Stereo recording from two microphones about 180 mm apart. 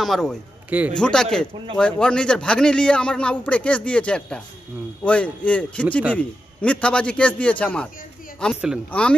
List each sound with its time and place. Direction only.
0.0 s a man's voice: centre (ahead or behind)
0.9 s a man's voice: 5° left (ahead or behind)